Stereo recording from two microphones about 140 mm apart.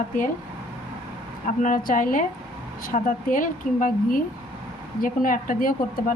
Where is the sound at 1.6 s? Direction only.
70° left (ahead or behind).